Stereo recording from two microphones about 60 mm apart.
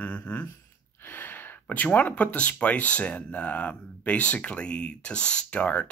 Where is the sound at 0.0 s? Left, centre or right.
Left.